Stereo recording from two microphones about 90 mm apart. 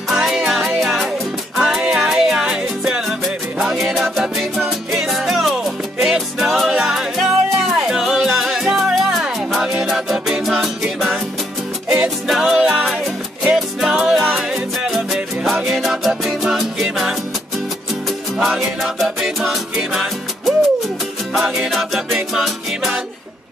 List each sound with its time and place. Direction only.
0.1 s music: 5° right (ahead or behind)
18.4 s music: 5° right (ahead or behind)